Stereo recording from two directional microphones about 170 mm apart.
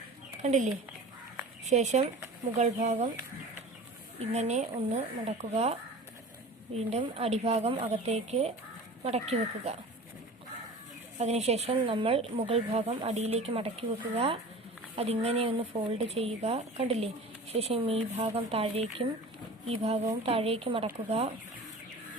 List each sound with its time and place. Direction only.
0.4 s speech: 45° right (ahead or behind)
4.2 s speech: 40° right (ahead or behind)
6.7 s speech: 35° right (ahead or behind)
11.2 s speech: 40° right (ahead or behind)
14.9 s speech: 35° right (ahead or behind)